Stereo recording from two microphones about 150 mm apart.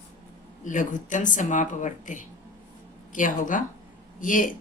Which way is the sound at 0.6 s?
60° left (ahead or behind).